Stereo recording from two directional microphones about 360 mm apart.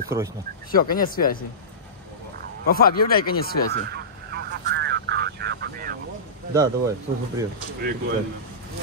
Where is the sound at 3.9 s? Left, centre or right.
Right.